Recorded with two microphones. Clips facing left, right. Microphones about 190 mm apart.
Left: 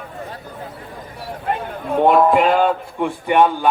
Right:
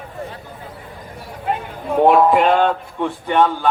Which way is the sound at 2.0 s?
Centre (ahead or behind).